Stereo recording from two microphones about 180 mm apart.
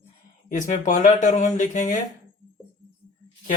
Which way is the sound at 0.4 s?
45° left (ahead or behind).